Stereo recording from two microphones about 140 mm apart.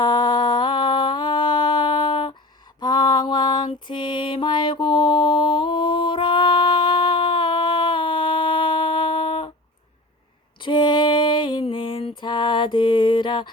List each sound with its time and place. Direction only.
0.0 s a sound: 30° left (ahead or behind)
3.7 s mantra: 35° left (ahead or behind)
10.6 s mantra: 35° left (ahead or behind)